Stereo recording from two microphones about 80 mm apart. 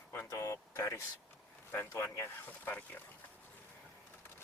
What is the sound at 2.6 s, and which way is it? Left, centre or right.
Speech, left.